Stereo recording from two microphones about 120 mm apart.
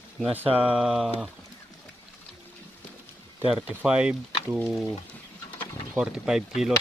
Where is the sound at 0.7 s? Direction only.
5° right (ahead or behind).